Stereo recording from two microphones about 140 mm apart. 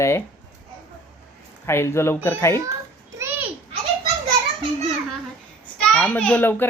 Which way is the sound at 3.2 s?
15° right (ahead or behind).